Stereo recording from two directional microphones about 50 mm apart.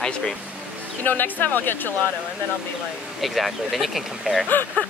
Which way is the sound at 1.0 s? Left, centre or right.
Left.